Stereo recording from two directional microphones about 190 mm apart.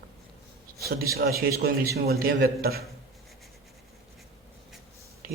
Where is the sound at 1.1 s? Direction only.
55° right (ahead or behind).